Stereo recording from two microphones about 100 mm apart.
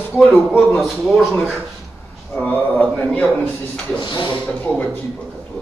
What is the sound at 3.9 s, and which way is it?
Speech, 50° left (ahead or behind).